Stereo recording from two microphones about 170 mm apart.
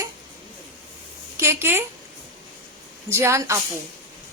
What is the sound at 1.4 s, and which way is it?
Speech, 15° right (ahead or behind).